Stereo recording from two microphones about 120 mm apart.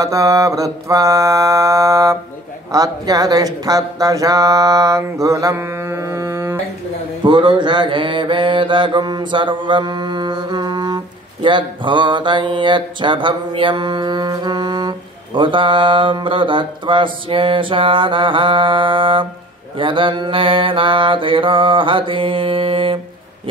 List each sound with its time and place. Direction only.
0.0 s speech: 25° right (ahead or behind)
7.2 s mantra: 40° right (ahead or behind)